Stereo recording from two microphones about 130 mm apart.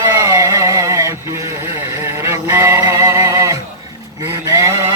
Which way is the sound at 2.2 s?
20° right (ahead or behind).